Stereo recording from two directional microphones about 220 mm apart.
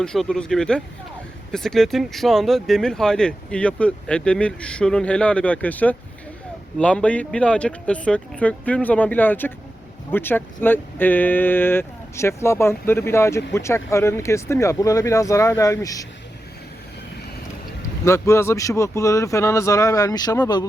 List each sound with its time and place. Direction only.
0.0 s speech: 5° left (ahead or behind)
18.0 s speech: 15° left (ahead or behind)